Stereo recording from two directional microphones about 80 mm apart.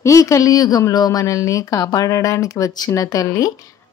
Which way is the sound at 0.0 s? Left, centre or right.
Left.